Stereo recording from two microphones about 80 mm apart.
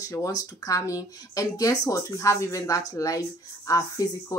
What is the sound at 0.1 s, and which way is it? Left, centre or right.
Speech, left.